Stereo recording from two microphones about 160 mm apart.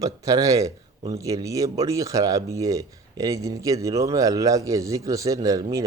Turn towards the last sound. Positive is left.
turn(degrees=-20)  # may be behind; listen again after turning